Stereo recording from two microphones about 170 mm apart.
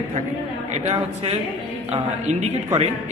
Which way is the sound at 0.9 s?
40° right (ahead or behind).